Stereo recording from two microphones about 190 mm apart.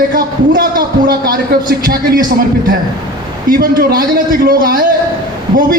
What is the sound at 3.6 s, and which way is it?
A man's voice, 50° right (ahead or behind).